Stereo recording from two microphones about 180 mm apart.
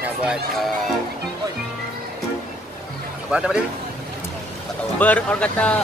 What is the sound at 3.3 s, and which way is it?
Speech, 5° right (ahead or behind).